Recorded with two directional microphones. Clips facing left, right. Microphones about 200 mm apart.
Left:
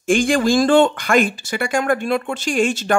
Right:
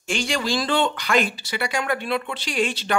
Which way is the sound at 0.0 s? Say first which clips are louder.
Left 10 dB; 50° left (ahead or behind).